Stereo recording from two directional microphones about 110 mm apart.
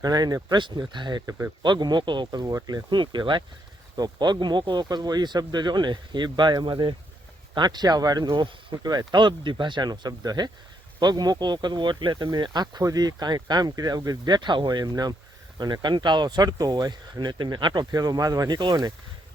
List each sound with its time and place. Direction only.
0.0 s speech: 35° right (ahead or behind)
2.2 s speech: 35° right (ahead or behind)